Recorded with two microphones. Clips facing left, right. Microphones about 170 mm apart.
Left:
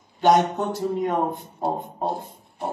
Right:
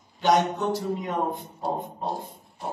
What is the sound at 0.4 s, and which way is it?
Speech, 50° left (ahead or behind).